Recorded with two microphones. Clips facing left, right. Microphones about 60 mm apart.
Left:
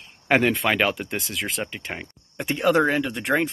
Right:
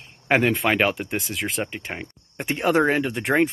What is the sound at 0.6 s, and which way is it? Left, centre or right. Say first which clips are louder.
Speech: right 1 dB; right.